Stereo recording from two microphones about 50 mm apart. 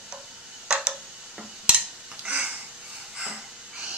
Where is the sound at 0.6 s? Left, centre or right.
Centre.